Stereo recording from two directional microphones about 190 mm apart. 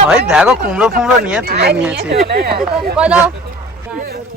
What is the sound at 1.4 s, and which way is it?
Speech, 60° right (ahead or behind).